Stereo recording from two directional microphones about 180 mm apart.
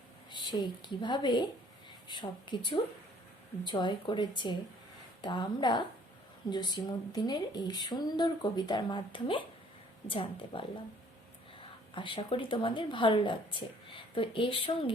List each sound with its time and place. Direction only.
0.3 s a woman's voice: 25° left (ahead or behind)
11.9 s a woman's voice: 30° left (ahead or behind)